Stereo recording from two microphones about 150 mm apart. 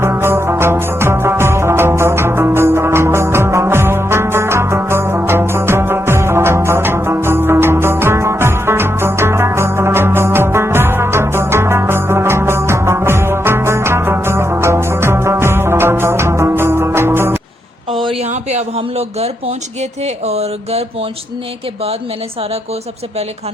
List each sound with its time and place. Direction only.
0.0 s music: 15° right (ahead or behind)
17.9 s a sound: 35° right (ahead or behind)
20.2 s mantra: 45° right (ahead or behind)